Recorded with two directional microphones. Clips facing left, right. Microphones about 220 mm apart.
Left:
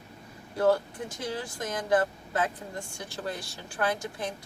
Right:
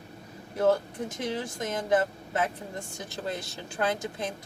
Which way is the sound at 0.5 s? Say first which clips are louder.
Even; 20° right (ahead or behind).